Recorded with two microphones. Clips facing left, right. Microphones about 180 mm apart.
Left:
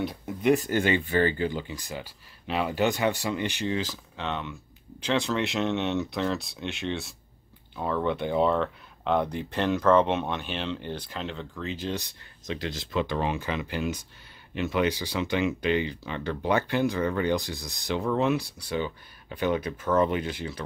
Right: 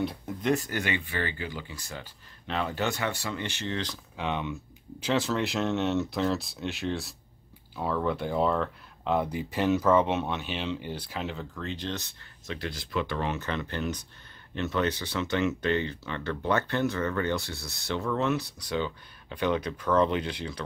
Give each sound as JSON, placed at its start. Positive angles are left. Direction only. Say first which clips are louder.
{"t": 0.7, "sound": "speech", "louder": "left 7 dB", "side_deg": 30}
{"t": 1.5, "sound": "speech", "louder": "left 5 dB", "side_deg": 20}
{"t": 4.2, "sound": "speech", "louder": "right 2 dB", "side_deg": -15}